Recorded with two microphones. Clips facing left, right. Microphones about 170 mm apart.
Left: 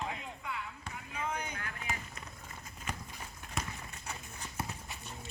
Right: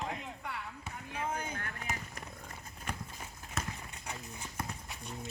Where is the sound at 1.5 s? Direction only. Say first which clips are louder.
Right 1 dB; 45° right (ahead or behind).